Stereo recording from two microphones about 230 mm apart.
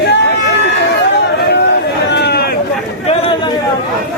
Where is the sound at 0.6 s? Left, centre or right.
Left.